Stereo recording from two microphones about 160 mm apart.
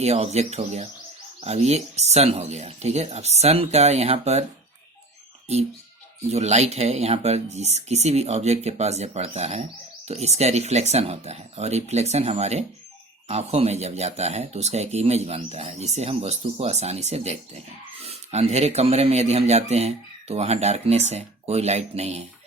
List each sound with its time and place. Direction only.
0.0 s speech: 40° right (ahead or behind)
6.3 s speech: 45° right (ahead or behind)